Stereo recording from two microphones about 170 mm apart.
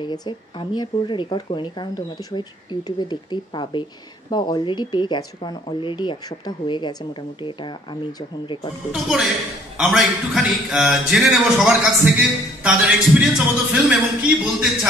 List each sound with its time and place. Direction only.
0.0 s speech: 25° left (ahead or behind)
8.9 s speech: centre (ahead or behind)